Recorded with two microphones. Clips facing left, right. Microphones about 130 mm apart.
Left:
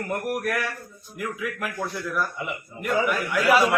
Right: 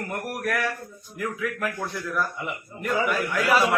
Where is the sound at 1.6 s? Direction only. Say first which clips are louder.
Even; 5° left (ahead or behind).